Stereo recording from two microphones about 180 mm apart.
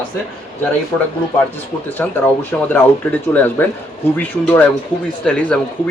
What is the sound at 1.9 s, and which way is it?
Speech, 10° left (ahead or behind).